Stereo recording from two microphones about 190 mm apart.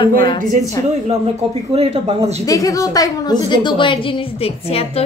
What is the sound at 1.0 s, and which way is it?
Speech, 30° right (ahead or behind).